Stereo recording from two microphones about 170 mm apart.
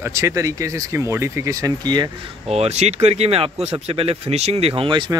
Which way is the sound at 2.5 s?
40° right (ahead or behind).